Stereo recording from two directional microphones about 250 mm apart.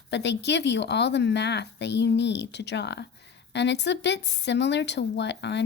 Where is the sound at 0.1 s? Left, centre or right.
Left.